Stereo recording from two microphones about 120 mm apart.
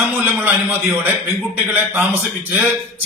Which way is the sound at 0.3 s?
15° right (ahead or behind).